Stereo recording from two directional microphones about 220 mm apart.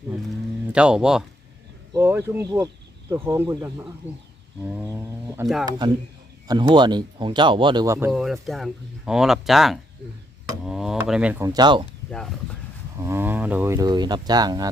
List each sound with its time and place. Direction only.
0.7 s speech: 5° right (ahead or behind)
5.4 s speech: 10° right (ahead or behind)
13.0 s speech: 10° right (ahead or behind)